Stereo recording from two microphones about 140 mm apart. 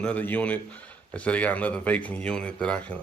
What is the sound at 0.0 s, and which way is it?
A man's voice, 10° left (ahead or behind).